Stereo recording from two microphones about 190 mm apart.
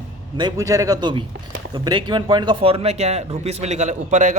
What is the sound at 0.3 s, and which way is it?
A man's voice, 20° right (ahead or behind).